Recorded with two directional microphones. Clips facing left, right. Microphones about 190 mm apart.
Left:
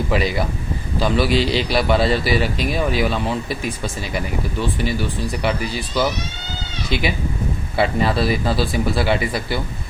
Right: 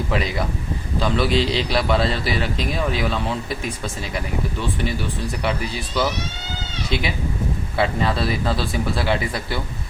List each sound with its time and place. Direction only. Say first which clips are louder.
0.1 s a man's voice: left 3 dB; 5° left (ahead or behind)